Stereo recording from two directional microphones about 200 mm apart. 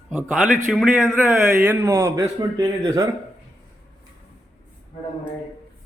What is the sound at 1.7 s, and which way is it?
Speech, 10° right (ahead or behind).